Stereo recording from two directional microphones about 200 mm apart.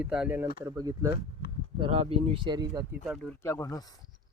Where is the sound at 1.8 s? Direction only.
30° right (ahead or behind).